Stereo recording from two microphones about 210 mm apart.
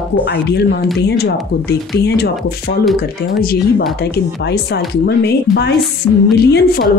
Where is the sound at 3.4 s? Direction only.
45° left (ahead or behind).